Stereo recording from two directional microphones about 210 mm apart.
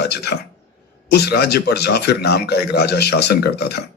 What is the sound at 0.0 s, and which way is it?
A man's voice, 50° left (ahead or behind).